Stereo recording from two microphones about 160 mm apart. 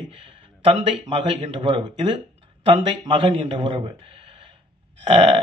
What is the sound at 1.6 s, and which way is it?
Speech, 30° right (ahead or behind).